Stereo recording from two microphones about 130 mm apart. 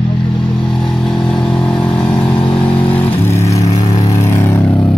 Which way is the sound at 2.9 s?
20° left (ahead or behind).